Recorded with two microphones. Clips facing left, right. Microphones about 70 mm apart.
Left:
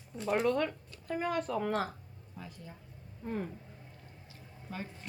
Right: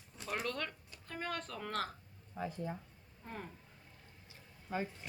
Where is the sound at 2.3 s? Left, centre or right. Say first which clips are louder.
Right 8 dB; right.